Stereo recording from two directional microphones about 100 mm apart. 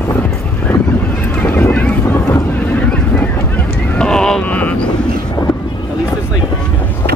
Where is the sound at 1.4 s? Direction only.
20° left (ahead or behind).